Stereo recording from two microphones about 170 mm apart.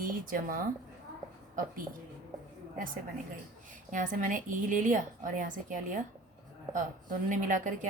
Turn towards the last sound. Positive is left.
turn(degrees=-50)  # may be behind; listen again after turning